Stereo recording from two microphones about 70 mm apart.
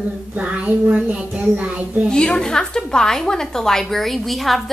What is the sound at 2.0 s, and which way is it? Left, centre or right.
A woman's voice, centre.